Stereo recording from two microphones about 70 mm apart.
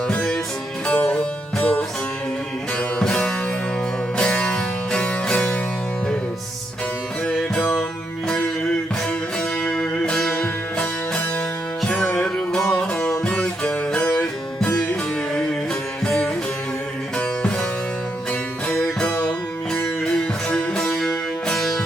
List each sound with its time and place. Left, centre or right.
0.9 s music: centre
9.6 s music: centre
16.0 s music: centre
18.8 s music: centre